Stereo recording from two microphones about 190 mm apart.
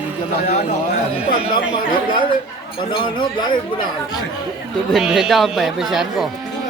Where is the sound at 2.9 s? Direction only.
25° left (ahead or behind).